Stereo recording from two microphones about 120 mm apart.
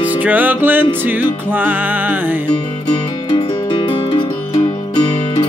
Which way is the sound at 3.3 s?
45° left (ahead or behind).